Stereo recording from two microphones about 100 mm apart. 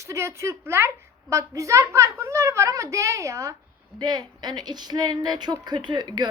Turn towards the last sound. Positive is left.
turn(degrees=-45)  # may be behind; listen again after turning